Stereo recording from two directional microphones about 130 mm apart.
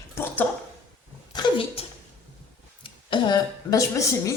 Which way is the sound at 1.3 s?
40° left (ahead or behind).